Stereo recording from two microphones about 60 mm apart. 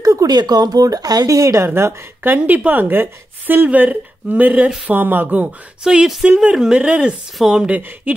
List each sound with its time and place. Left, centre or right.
0.0 s speech: right
1.7 s a woman's voice: right
2.3 s a woman's voice: right
3.6 s speech: right
5.9 s speech: centre
6.2 s speech: right
7.3 s a woman's voice: centre
7.6 s speech: right